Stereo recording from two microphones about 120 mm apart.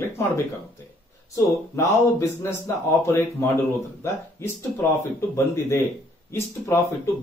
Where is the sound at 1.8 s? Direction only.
25° left (ahead or behind).